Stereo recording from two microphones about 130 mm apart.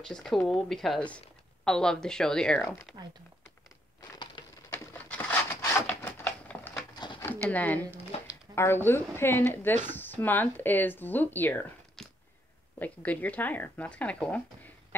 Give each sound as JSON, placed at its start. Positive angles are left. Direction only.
{"t": 0.0, "sound": "speech", "side_deg": 5}
{"t": 4.0, "sound": "crushing", "side_deg": 35}
{"t": 4.6, "sound": "a sound", "side_deg": 15}
{"t": 7.4, "sound": "speech", "side_deg": 10}
{"t": 12.7, "sound": "speech", "side_deg": 10}